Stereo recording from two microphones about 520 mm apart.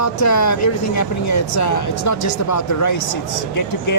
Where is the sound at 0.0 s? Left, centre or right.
Left.